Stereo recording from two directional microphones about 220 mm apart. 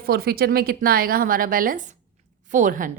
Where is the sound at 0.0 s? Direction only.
45° right (ahead or behind).